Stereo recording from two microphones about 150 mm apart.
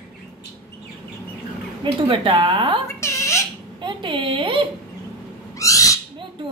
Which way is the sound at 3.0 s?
20° left (ahead or behind).